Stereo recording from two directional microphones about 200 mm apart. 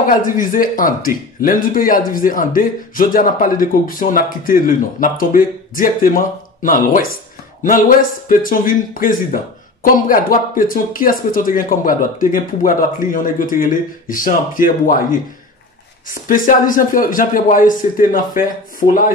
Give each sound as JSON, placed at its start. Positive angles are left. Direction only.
{"t": 0.0, "sound": "speech", "side_deg": 45}
{"t": 16.3, "sound": "speech", "side_deg": 40}